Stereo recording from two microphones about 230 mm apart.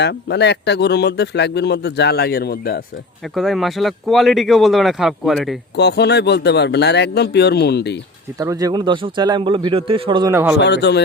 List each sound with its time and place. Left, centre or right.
0.0 s speech: left
3.3 s speech: centre
5.7 s speech: left
8.4 s a man's voice: centre
10.6 s speech: left